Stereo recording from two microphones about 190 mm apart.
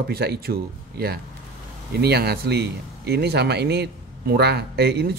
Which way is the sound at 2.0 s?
60° right (ahead or behind).